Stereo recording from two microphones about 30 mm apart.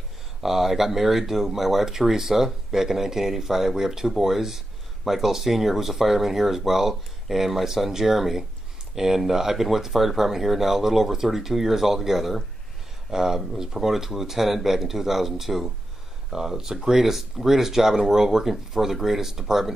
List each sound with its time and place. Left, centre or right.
0.4 s speech: centre
13.1 s speech: centre